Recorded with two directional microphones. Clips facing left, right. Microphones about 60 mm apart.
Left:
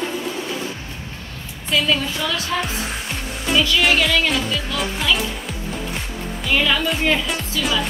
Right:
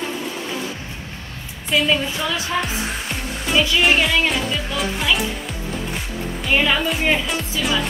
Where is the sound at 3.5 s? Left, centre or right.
Right.